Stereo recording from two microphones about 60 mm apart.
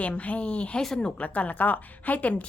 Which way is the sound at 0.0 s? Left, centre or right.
Left.